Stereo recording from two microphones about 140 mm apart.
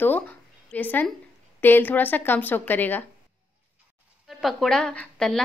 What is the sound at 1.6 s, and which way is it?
A woman's voice, 15° left (ahead or behind).